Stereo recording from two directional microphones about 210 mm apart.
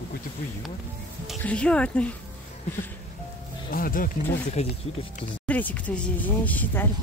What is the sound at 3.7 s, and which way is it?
Speech, 40° left (ahead or behind).